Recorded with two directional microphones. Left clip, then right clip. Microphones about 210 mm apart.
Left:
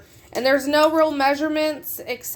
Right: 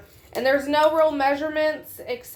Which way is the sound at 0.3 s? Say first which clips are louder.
Left 2 dB; 55° left (ahead or behind).